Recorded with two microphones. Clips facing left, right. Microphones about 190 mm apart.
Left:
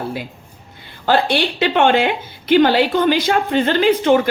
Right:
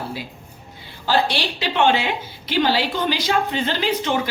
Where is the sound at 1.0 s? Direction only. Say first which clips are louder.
Left 5 dB; 55° left (ahead or behind).